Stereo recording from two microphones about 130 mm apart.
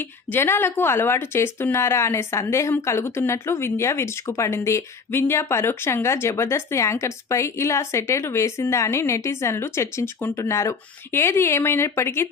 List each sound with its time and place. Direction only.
0.3 s a woman's voice: 20° left (ahead or behind)